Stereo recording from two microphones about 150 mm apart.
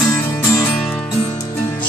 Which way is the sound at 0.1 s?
20° left (ahead or behind).